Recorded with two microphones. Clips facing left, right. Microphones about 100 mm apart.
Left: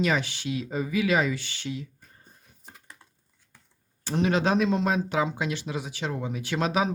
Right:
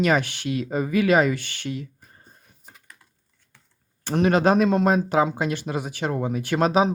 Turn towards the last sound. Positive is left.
turn(degrees=-50)  # may be behind; listen again after turning